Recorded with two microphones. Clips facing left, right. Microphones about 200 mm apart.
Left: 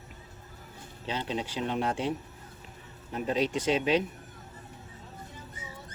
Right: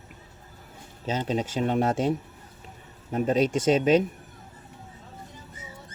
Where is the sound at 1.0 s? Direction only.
45° right (ahead or behind).